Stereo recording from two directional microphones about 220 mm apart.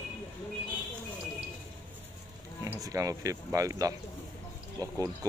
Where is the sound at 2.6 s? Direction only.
15° right (ahead or behind).